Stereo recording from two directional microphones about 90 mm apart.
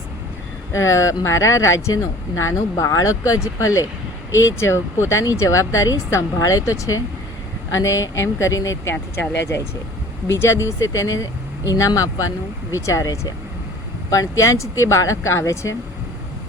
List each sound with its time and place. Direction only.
0.7 s speech: 35° left (ahead or behind)
10.3 s speech: 30° left (ahead or behind)